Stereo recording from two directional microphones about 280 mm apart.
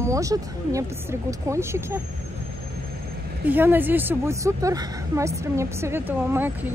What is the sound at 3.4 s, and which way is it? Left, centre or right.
Speech, centre.